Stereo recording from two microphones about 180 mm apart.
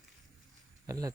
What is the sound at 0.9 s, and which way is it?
Speech, 20° right (ahead or behind).